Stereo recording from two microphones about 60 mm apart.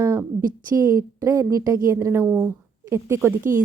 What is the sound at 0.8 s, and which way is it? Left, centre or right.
A woman's voice, right.